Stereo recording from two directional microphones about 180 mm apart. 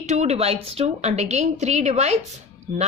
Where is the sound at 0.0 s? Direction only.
40° right (ahead or behind).